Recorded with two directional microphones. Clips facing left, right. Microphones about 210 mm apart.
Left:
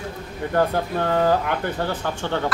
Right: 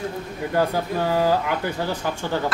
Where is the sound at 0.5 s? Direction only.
5° right (ahead or behind).